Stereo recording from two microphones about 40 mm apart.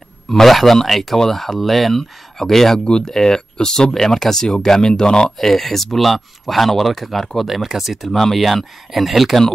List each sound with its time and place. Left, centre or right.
0.3 s speech: centre; by 5.3 s left
5.4 s speech: centre